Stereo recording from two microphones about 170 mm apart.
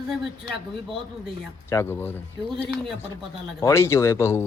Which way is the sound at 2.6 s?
10° right (ahead or behind).